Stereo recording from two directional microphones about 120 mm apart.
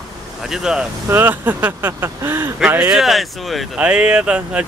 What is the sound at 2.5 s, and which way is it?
Speech, 10° right (ahead or behind).